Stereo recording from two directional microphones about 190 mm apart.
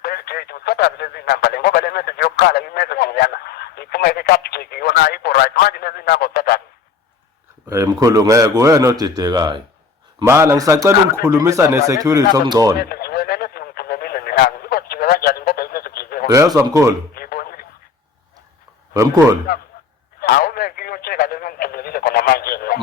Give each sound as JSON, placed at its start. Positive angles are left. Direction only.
{"t": 0.0, "sound": "radio", "side_deg": 50}
{"t": 7.7, "sound": "speech", "side_deg": -15}
{"t": 12.8, "sound": "radio", "side_deg": 55}
{"t": 16.3, "sound": "speech", "side_deg": -15}
{"t": 17.2, "sound": "a sound", "side_deg": 50}
{"t": 18.9, "sound": "speech", "side_deg": -15}
{"t": 20.1, "sound": "radio", "side_deg": 50}